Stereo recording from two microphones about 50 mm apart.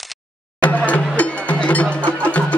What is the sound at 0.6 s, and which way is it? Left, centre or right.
Music, left.